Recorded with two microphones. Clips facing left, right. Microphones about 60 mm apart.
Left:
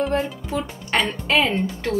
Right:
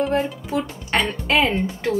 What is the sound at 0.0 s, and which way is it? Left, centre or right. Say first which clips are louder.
A woman's voice: right 1 dB; centre.